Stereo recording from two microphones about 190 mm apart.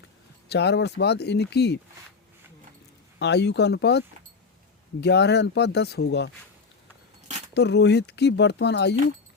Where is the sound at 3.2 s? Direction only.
65° left (ahead or behind).